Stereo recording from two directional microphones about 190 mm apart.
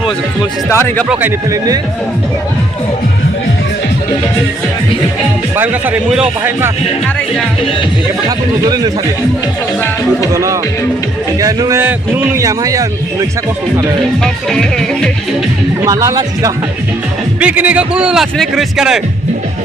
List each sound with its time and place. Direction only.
0.7 s speech: 10° left (ahead or behind)
1.0 s a man's voice: 5° right (ahead or behind)
5.5 s a man's voice: 10° right (ahead or behind)
8.6 s speech: 20° right (ahead or behind)
10.3 s a man's voice: 15° right (ahead or behind)
14.5 s speech: 5° left (ahead or behind)
15.8 s a man's voice: 15° right (ahead or behind)
17.4 s speech: 10° right (ahead or behind)